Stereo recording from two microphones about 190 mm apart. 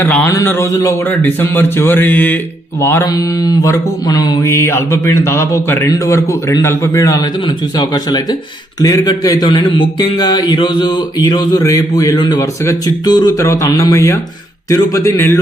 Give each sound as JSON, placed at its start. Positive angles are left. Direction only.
{"t": 0.0, "sound": "mantra", "side_deg": 10}
{"t": 8.8, "sound": "speech", "side_deg": 20}
{"t": 14.7, "sound": "mantra", "side_deg": 15}